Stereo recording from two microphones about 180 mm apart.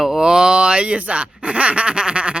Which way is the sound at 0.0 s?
5° right (ahead or behind).